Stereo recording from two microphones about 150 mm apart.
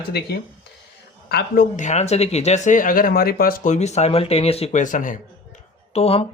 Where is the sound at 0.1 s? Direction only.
90° left.